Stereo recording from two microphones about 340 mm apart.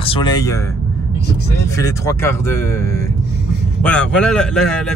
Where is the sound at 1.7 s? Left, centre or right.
Centre.